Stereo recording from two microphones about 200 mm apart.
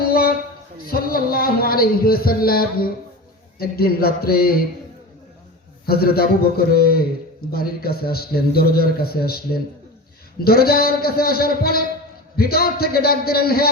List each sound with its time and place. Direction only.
0.1 s a sound: 45° left (ahead or behind)
0.9 s a man's voice: 50° left (ahead or behind)
5.8 s a man's voice: 50° left (ahead or behind)